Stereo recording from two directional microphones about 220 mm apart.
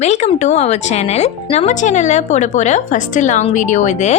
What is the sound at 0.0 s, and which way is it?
Speech, 30° left (ahead or behind).